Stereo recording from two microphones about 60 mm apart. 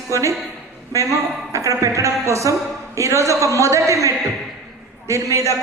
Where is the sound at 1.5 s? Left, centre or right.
Right.